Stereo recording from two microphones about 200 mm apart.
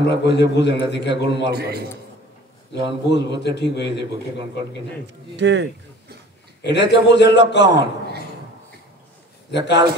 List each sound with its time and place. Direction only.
0.0 s a man's voice: 60° left (ahead or behind)
1.5 s a man's voice: 50° right (ahead or behind)
3.1 s a man's voice: 60° left (ahead or behind)
5.3 s speech: 60° right (ahead or behind)
6.6 s a man's voice: 60° left (ahead or behind)
9.5 s a man's voice: 55° left (ahead or behind)